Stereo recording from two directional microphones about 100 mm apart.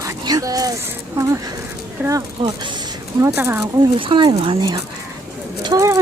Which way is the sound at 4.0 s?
55° right (ahead or behind).